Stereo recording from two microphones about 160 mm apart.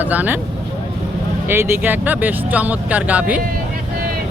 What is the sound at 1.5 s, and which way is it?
Speech, 15° right (ahead or behind).